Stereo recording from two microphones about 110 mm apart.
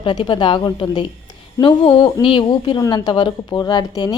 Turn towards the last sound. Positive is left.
turn(degrees=40)  # may be behind; listen again after turning